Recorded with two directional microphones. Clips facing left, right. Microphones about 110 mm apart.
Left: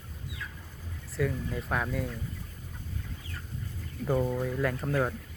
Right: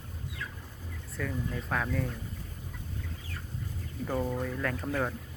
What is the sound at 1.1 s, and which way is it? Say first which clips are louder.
Speech: left 4 dB; 5° left (ahead or behind).